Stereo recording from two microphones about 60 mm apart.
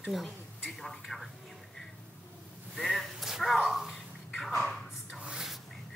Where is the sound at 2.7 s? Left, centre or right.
Centre.